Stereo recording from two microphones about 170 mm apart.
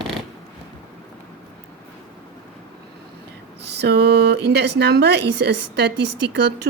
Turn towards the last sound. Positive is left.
turn(degrees=-85)